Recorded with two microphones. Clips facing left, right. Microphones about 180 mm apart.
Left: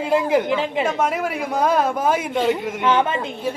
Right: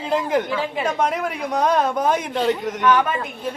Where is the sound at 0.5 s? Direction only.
20° left (ahead or behind).